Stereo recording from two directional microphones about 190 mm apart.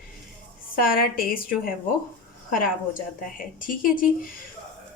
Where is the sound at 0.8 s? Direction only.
50° left (ahead or behind).